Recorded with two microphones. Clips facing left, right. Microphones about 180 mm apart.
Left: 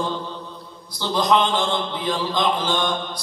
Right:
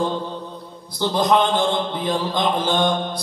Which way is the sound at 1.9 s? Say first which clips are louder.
Right 2 dB; 55° right (ahead or behind).